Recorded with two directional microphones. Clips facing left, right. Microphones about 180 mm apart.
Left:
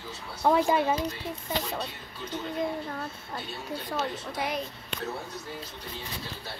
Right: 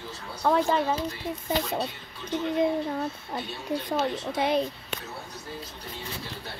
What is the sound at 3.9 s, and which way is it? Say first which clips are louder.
Speech: right 4 dB; 25° right (ahead or behind).